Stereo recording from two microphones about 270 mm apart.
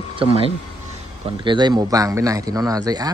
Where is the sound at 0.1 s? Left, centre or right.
Right.